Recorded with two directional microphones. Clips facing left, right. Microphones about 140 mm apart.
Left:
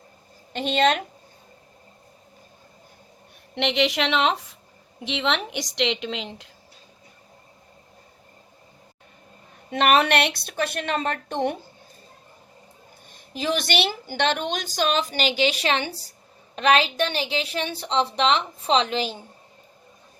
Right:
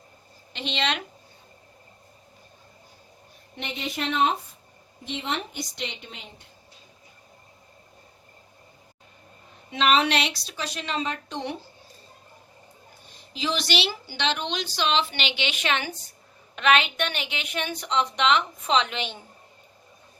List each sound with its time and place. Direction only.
0.5 s a woman's voice: 45° left (ahead or behind)
3.5 s a woman's voice: 80° left
9.6 s a woman's voice: 55° left (ahead or behind)
13.1 s a woman's voice: 50° left (ahead or behind); by 19.2 s 35° left (ahead or behind)